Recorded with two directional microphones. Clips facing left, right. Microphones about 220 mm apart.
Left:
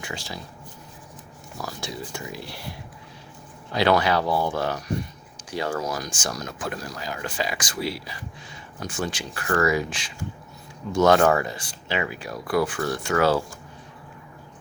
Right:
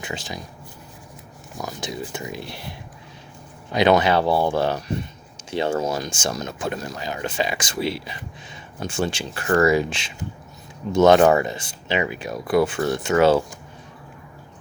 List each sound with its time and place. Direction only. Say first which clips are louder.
0.0 s speech: right 3 dB; 20° right (ahead or behind)
1.5 s speech: right 3 dB; 20° right (ahead or behind)